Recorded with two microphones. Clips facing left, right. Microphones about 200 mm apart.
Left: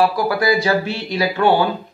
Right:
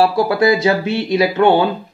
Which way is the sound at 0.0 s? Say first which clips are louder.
Right 4 dB; 25° right (ahead or behind).